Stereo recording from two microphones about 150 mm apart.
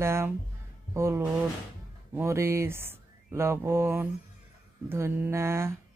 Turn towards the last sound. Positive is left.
turn(degrees=-15)  # may be behind; listen again after turning